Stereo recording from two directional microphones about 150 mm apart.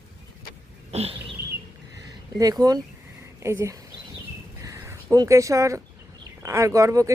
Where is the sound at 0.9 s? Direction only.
40° right (ahead or behind).